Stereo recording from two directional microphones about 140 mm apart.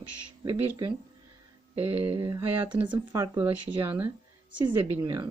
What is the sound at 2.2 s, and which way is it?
A woman's voice, 20° right (ahead or behind).